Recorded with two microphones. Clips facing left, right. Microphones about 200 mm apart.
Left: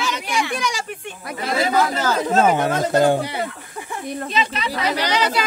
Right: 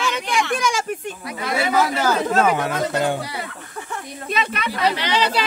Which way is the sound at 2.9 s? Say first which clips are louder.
Left 9 dB; 40° left (ahead or behind).